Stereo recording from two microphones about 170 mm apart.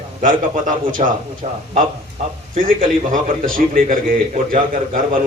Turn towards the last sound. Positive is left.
turn(degrees=-55)  # may be behind; listen again after turning